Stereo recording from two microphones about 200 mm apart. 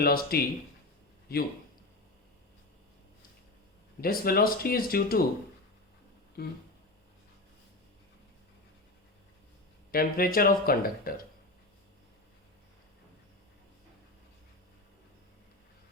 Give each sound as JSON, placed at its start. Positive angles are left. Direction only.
{"t": 0.0, "sound": "speech", "side_deg": 50}
{"t": 4.0, "sound": "speech", "side_deg": 50}
{"t": 6.4, "sound": "speech", "side_deg": 50}
{"t": 9.9, "sound": "speech", "side_deg": 45}